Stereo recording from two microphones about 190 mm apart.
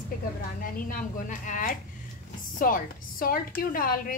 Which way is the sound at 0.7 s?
45° left (ahead or behind).